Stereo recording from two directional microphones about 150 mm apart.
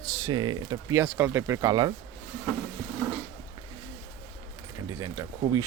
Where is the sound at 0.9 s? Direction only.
15° right (ahead or behind).